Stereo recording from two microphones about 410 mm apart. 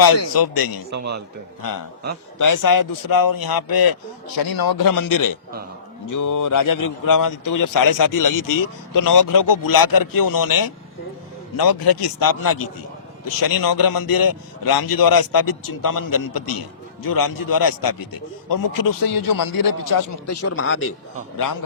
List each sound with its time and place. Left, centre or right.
0.3 s a man's voice: left
0.9 s a man's voice: right
2.4 s a man's voice: left